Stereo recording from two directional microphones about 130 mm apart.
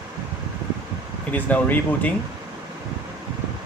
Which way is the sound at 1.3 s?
10° left (ahead or behind).